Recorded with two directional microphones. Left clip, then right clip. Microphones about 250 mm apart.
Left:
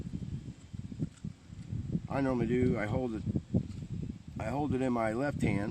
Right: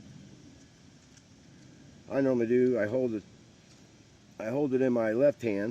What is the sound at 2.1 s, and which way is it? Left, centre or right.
Speech, left.